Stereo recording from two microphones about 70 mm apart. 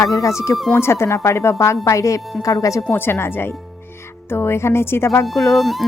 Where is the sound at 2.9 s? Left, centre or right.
Left.